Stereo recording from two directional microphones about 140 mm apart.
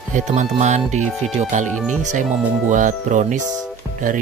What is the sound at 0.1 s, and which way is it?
Speech, 55° right (ahead or behind).